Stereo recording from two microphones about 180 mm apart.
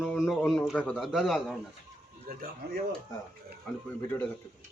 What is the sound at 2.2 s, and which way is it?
Speech, 55° right (ahead or behind).